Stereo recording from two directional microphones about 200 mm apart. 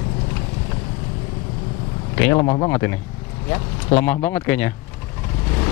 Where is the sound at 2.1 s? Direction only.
10° left (ahead or behind).